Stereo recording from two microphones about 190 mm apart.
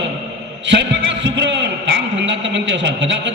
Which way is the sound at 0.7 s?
65° right (ahead or behind).